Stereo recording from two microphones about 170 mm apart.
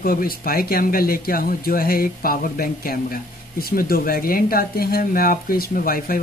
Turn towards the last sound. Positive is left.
turn(degrees=60)  # may be behind; listen again after turning